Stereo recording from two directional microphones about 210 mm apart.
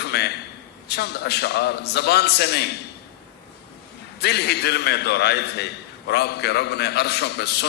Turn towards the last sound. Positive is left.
turn(degrees=50)  # may be behind; listen again after turning